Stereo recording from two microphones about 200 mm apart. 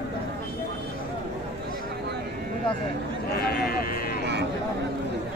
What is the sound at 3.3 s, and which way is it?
Speech, 50° left (ahead or behind).